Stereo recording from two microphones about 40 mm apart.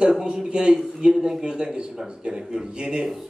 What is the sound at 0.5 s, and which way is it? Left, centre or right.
A man's voice, right.